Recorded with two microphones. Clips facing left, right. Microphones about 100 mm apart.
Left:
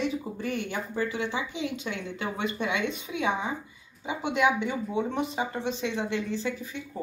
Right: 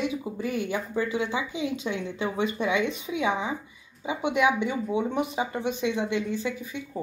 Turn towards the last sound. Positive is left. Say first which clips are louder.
# right 1 dB
turn(degrees=-15)  # may be behind; listen again after turning